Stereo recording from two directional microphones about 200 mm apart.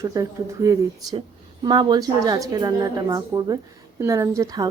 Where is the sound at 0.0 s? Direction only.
15° right (ahead or behind).